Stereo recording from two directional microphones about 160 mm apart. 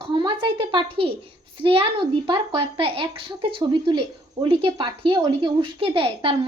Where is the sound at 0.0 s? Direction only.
25° right (ahead or behind).